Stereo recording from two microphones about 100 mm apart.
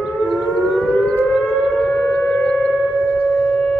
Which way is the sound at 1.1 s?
15° left (ahead or behind).